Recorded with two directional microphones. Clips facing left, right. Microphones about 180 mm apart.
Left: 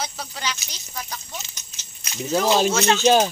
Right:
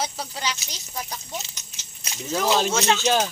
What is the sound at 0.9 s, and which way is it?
Speech, 20° right (ahead or behind).